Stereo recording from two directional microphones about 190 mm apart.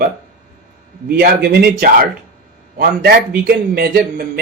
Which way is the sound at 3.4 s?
55° right (ahead or behind).